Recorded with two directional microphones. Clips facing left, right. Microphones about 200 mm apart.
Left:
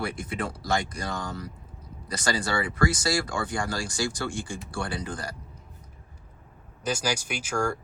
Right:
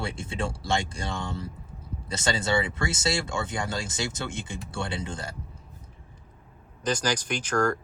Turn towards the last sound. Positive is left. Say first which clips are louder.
# right 3 dB
turn(degrees=10)  # may be behind; listen again after turning